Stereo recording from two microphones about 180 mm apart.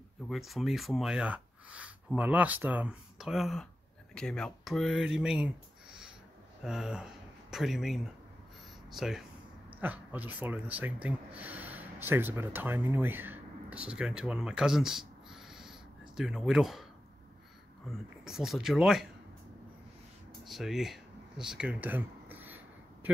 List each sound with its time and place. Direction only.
0.3 s speech: centre (ahead or behind)
17.9 s speech: centre (ahead or behind)
20.4 s a sound: centre (ahead or behind)